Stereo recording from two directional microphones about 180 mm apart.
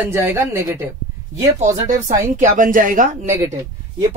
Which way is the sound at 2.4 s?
45° right (ahead or behind).